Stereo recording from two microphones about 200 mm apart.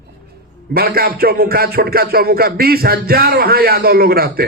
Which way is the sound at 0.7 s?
50° right (ahead or behind).